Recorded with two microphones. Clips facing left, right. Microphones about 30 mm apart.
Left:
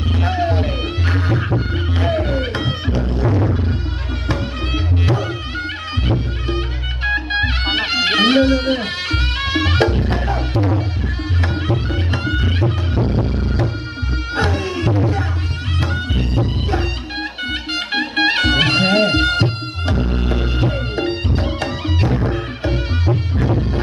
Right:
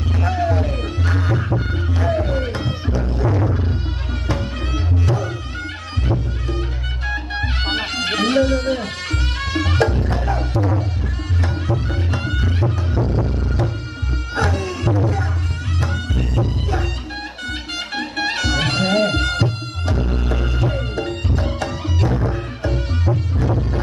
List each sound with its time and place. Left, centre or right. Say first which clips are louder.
0.2 s music: left 1 dB; left
2.0 s music: left 1 dB; left
3.1 s music: left 1 dB; left
5.0 s music: left 2 dB; left
11.4 s music: left 2 dB; left
20.0 s music: left 2 dB; left
23.5 s music: left 3 dB; left